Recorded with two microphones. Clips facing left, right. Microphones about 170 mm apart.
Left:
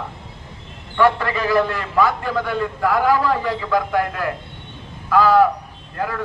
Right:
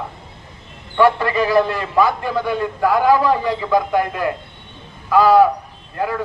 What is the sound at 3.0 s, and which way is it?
A man's voice, 20° right (ahead or behind).